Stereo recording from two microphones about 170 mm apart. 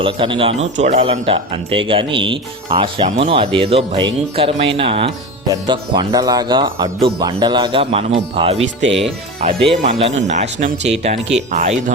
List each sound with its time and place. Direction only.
0.0 s speech: 30° right (ahead or behind)